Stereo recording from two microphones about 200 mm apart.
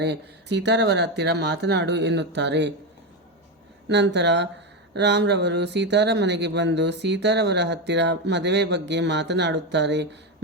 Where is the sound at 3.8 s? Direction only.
60° right (ahead or behind).